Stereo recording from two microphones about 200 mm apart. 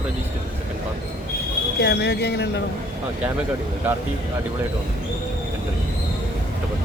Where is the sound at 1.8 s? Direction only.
55° left (ahead or behind).